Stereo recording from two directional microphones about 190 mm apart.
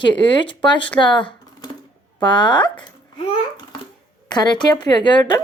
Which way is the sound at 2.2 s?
25° left (ahead or behind).